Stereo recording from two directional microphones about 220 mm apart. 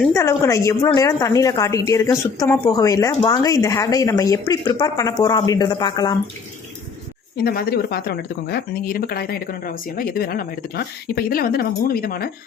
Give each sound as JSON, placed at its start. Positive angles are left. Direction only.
{"t": 0.1, "sound": "a woman's voice", "side_deg": 15}
{"t": 7.4, "sound": "speech", "side_deg": 45}